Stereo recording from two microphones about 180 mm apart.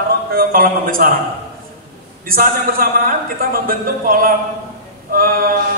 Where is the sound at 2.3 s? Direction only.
55° right (ahead or behind).